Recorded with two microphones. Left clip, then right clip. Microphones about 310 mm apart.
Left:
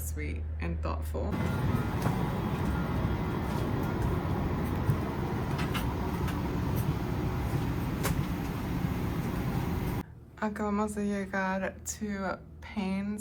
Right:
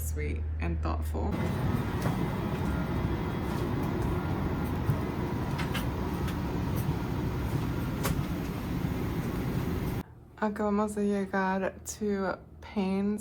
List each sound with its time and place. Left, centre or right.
0.2 s speech: centre
1.3 s vehicle: right
10.4 s a woman's voice: centre